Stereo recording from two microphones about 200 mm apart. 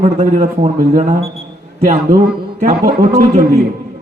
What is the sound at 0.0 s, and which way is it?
Speech, 35° right (ahead or behind).